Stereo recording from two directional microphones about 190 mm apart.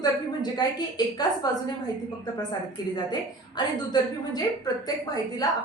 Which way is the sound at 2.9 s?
20° left (ahead or behind).